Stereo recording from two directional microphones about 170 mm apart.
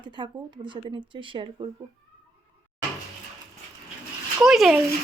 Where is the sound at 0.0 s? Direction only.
25° right (ahead or behind).